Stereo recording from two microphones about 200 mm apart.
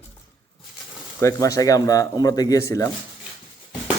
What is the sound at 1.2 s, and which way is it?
Speech, 15° left (ahead or behind).